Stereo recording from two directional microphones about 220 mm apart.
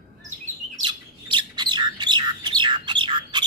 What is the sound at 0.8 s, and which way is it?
Bird, 20° right (ahead or behind).